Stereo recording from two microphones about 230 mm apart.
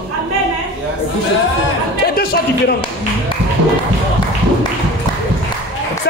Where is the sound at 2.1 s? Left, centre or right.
Left.